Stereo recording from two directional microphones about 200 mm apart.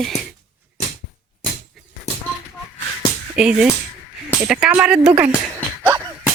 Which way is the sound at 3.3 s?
5° right (ahead or behind).